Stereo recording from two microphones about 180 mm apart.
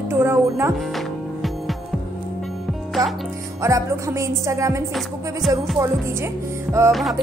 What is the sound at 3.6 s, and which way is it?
A woman's voice, 15° right (ahead or behind).